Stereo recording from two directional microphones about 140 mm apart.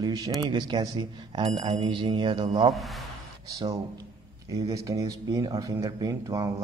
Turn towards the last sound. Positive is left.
turn(degrees=-25)  # may be behind; listen again after turning